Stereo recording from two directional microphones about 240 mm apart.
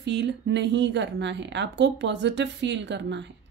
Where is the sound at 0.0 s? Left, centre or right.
Right.